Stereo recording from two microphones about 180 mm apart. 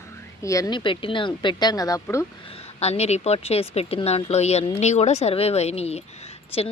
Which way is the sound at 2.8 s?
35° left (ahead or behind).